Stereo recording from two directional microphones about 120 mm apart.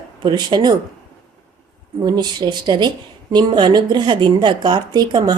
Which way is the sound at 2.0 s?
35° right (ahead or behind).